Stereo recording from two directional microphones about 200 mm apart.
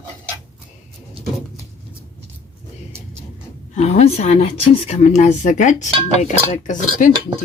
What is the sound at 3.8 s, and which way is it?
Speech, 35° left (ahead or behind).